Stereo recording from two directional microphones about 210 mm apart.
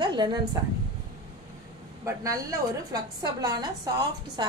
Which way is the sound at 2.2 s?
15° right (ahead or behind).